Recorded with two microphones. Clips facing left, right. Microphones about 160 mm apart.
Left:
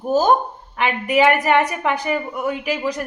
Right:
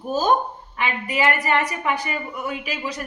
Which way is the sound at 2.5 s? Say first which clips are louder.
Left 9 dB; 60° left (ahead or behind).